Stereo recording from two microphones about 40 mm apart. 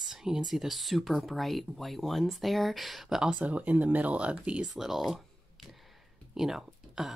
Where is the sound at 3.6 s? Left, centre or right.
Right.